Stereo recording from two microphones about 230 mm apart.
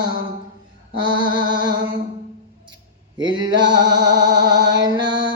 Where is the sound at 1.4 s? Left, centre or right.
Centre.